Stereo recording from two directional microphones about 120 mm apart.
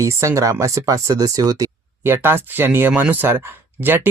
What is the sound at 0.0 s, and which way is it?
Speech, 25° right (ahead or behind).